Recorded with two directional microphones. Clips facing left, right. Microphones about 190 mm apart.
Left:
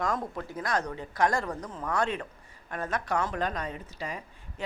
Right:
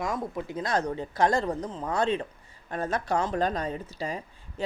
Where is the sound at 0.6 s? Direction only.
25° right (ahead or behind).